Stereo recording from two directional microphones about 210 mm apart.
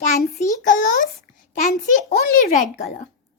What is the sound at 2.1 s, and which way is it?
Speech, 45° left (ahead or behind).